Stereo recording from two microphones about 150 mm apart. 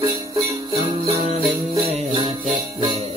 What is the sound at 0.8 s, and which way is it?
Music, 40° right (ahead or behind).